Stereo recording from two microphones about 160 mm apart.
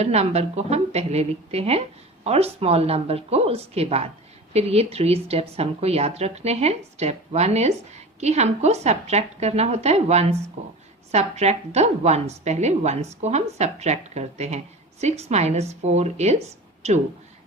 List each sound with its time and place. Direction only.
0.0 s a woman's voice: 40° right (ahead or behind)